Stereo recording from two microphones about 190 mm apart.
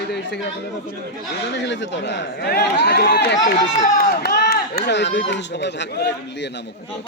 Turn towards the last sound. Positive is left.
turn(degrees=60)  # may be behind; listen again after turning